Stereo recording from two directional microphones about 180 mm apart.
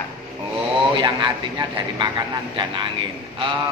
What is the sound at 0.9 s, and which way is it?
A man's voice, 25° right (ahead or behind).